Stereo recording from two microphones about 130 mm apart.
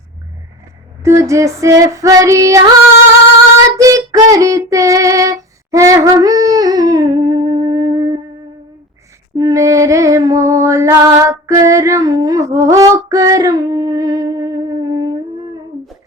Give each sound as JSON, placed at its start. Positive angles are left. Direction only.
{"t": 1.0, "sound": "female singing", "side_deg": -20}
{"t": 3.8, "sound": "child singing", "side_deg": -25}
{"t": 9.3, "sound": "music", "side_deg": -25}